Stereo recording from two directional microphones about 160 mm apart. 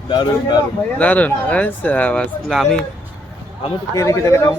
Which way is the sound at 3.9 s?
20° left (ahead or behind).